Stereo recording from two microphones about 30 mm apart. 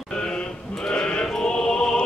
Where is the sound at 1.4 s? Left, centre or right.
Left.